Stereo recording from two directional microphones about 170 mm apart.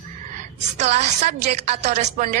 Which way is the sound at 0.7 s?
40° right (ahead or behind).